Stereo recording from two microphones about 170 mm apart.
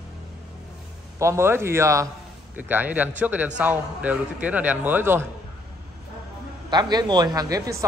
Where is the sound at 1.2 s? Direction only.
15° right (ahead or behind).